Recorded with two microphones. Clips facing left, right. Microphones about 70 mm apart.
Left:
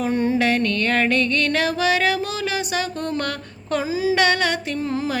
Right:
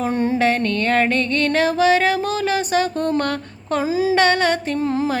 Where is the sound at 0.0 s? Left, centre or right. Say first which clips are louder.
Right 1 dB; right.